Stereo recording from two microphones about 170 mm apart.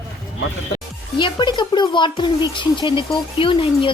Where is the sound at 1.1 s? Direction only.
30° left (ahead or behind).